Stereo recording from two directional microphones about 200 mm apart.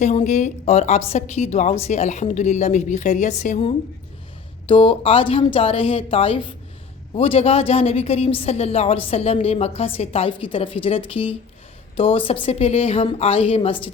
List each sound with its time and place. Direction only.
0.0 s a woman's voice: 35° left (ahead or behind)